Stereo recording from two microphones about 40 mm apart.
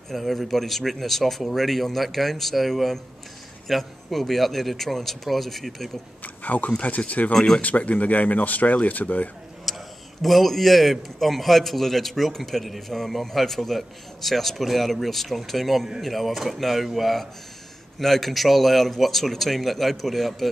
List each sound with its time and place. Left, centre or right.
0.1 s a man's voice: centre
6.2 s speech: left
7.3 s speech: centre
7.6 s speech: left
9.7 s a sound: centre
10.2 s a man's voice: centre